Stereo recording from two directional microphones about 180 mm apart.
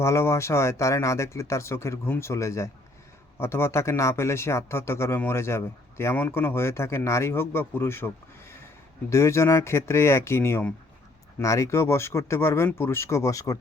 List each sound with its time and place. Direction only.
0.0 s speech: 15° left (ahead or behind)